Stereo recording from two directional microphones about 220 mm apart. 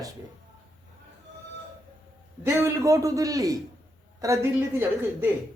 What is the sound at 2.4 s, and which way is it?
Speech, 10° right (ahead or behind).